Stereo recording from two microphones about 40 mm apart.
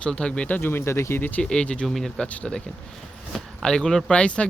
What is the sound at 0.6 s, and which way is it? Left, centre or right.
Speech, left.